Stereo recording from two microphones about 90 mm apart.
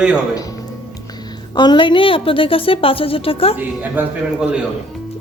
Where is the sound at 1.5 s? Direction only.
55° left (ahead or behind); by 3.5 s 90° left.